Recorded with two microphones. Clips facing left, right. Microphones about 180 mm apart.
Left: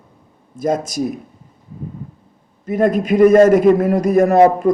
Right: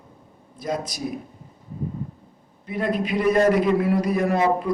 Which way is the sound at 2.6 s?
45° left (ahead or behind).